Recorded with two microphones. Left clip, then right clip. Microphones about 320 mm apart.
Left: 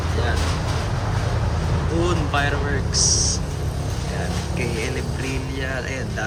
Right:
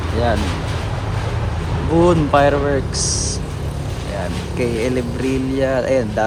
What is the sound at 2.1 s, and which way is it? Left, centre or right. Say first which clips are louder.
Speech: right 10 dB; centre.